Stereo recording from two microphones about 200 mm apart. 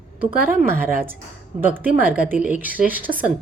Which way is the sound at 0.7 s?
10° right (ahead or behind).